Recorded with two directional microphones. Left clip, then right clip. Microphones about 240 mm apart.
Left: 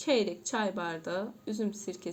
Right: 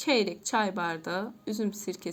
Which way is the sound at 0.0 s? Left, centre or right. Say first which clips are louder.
Right 2 dB; right.